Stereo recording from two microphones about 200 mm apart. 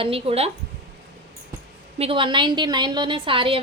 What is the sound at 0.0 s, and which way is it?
Speech, 30° right (ahead or behind).